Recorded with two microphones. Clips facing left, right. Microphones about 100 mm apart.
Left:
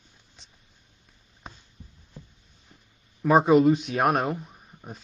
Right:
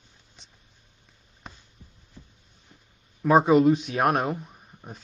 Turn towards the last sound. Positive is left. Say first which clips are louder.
# left 1 dB
turn(degrees=0)  # may be behind; listen again after turning